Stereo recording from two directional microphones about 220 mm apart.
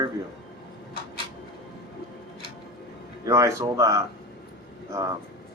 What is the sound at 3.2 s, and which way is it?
Speech, 15° right (ahead or behind).